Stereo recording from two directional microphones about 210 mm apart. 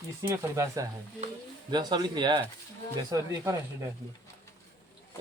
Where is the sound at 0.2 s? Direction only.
15° right (ahead or behind).